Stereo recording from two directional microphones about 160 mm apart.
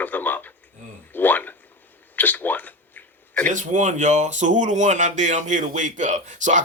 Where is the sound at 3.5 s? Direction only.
50° right (ahead or behind).